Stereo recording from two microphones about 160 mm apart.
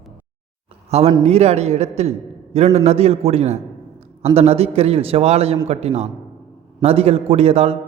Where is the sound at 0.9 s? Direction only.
40° right (ahead or behind).